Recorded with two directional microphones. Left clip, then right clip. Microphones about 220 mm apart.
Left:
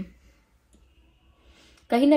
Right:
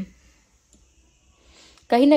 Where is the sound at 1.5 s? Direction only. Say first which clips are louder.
Right 5 dB; 35° right (ahead or behind).